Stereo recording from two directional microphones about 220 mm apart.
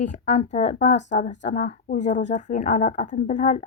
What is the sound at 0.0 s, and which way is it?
A woman's voice, 30° left (ahead or behind).